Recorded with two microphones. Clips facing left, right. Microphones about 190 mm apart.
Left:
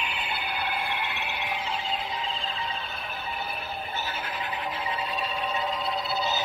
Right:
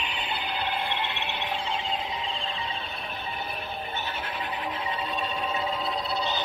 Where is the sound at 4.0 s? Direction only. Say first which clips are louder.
Even; centre (ahead or behind).